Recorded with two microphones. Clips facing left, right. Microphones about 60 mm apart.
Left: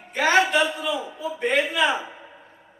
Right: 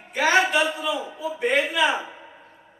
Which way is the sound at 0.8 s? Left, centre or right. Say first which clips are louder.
Even; centre.